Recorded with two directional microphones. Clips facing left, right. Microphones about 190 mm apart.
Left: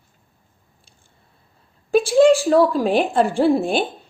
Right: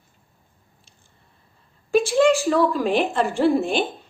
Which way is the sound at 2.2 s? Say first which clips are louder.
Left 6 dB; 35° left (ahead or behind).